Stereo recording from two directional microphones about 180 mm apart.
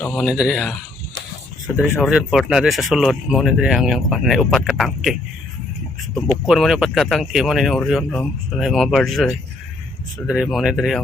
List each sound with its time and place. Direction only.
0.0 s speech: 5° left (ahead or behind)
1.7 s speech: 5° right (ahead or behind)
6.4 s speech: centre (ahead or behind)